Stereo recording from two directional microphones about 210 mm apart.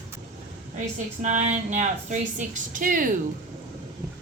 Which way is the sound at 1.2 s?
35° right (ahead or behind).